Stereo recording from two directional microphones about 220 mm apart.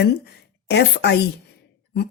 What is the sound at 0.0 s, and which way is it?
Speech, 50° left (ahead or behind).